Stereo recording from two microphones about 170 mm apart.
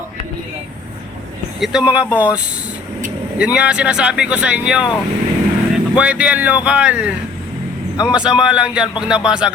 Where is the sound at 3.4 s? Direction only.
5° right (ahead or behind).